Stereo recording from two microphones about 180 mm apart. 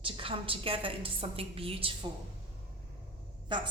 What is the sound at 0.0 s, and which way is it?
A woman's voice, 30° right (ahead or behind).